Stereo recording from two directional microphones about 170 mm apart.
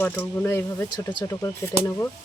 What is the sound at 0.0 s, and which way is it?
Speech, 10° left (ahead or behind).